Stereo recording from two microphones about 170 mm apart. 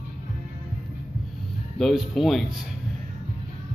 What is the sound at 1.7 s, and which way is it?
Speech, centre (ahead or behind).